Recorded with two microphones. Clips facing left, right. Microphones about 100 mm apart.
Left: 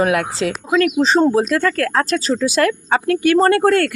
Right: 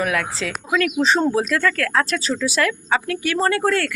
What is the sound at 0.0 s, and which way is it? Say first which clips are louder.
Speech: left 6 dB; 30° left (ahead or behind).